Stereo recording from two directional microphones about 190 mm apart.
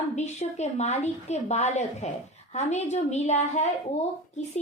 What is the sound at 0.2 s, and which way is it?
A woman's voice, 35° left (ahead or behind).